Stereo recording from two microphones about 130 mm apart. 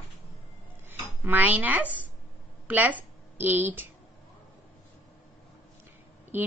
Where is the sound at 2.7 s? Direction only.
15° right (ahead or behind).